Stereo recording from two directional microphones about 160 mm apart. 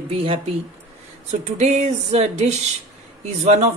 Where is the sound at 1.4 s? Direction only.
45° right (ahead or behind).